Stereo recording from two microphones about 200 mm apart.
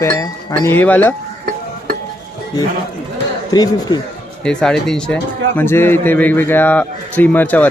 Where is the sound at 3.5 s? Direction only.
20° left (ahead or behind).